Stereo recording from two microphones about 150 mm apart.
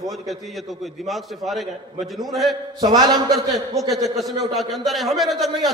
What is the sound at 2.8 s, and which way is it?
Speech, 25° right (ahead or behind).